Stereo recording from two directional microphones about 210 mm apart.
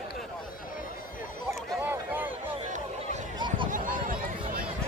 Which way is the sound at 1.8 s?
10° right (ahead or behind).